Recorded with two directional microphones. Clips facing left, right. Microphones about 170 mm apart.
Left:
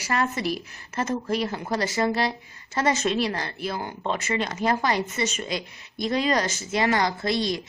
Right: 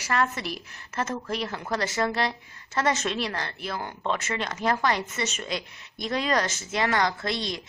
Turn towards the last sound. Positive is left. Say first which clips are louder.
# left 4 dB
turn(degrees=5)  # may be behind; listen again after turning